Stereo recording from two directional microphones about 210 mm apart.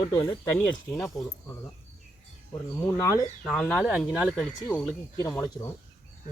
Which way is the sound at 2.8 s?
15° left (ahead or behind).